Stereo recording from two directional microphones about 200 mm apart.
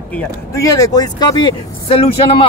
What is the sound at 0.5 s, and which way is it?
Speech, 15° left (ahead or behind).